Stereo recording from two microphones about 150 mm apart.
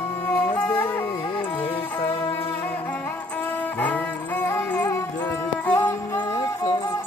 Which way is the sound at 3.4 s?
10° left (ahead or behind).